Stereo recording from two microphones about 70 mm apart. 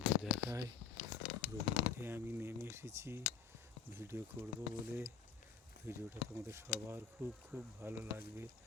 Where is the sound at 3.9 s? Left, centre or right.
Right.